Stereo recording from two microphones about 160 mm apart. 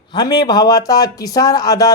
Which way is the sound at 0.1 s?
25° left (ahead or behind).